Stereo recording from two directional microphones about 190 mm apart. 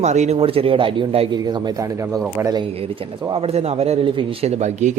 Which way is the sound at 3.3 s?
30° right (ahead or behind).